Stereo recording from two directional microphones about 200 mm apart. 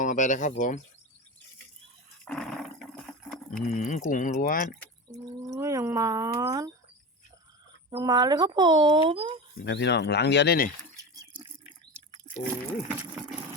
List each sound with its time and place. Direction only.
0.0 s speech: 40° left (ahead or behind)
2.2 s a sound: centre (ahead or behind)
3.5 s speech: 40° left (ahead or behind)
5.1 s a sound: 20° right (ahead or behind)
7.9 s speech: 20° right (ahead or behind)
9.6 s speech: 60° left (ahead or behind)
12.9 s pump: 5° right (ahead or behind)